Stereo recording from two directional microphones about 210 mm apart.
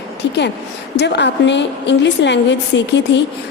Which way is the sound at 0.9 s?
55° left (ahead or behind).